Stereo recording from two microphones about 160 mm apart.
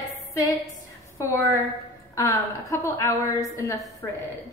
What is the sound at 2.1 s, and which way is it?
A woman's voice, 20° left (ahead or behind).